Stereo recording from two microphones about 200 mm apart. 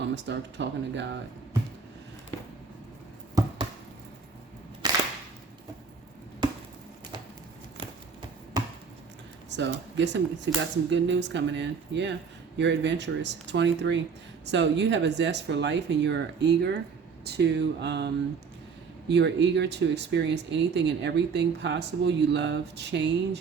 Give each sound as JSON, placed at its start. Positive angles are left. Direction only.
{"t": 0.0, "sound": "speech", "side_deg": -60}
{"t": 4.8, "sound": "cap gun", "side_deg": -20}
{"t": 9.5, "sound": "speech", "side_deg": -60}